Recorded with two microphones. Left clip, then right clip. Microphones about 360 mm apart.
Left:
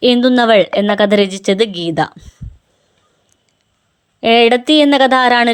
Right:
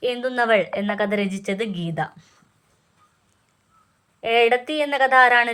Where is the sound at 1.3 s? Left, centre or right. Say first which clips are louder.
Left 12 dB; centre.